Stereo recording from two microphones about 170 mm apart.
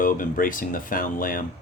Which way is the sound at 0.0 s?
55° left (ahead or behind).